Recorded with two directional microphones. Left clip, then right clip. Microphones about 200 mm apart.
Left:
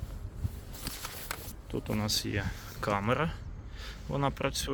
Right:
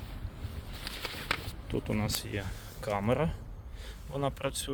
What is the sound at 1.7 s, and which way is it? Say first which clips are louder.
Speech: left 1 dB; centre (ahead or behind).